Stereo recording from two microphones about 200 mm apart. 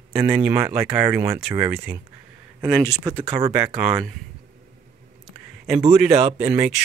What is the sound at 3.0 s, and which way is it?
Speech, 25° right (ahead or behind).